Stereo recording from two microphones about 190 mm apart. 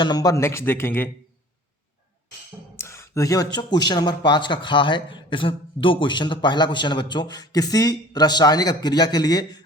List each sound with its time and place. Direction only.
0.0 s speech: 20° left (ahead or behind)
2.7 s speech: 15° left (ahead or behind)